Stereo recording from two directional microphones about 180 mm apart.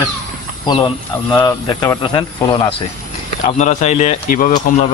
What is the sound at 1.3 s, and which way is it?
Speech, 25° left (ahead or behind).